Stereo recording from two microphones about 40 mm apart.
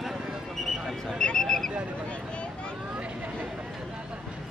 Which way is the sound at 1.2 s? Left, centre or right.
Centre.